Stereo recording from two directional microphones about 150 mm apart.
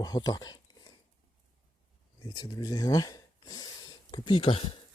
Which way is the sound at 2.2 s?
25° left (ahead or behind).